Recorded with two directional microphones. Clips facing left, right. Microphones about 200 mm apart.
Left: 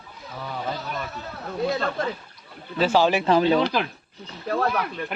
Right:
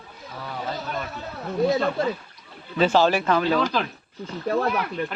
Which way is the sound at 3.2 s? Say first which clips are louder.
Left 3 dB; 25° left (ahead or behind).